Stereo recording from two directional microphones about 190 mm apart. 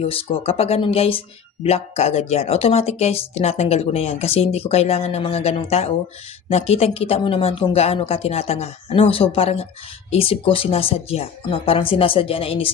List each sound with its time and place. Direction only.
0.0 s speech: 30° left (ahead or behind)